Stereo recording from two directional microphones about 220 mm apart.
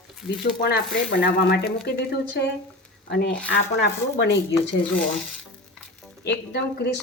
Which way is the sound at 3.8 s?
50° left (ahead or behind).